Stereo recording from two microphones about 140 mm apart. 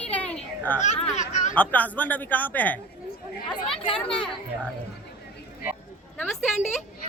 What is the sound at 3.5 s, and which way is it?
Speech, 40° left (ahead or behind).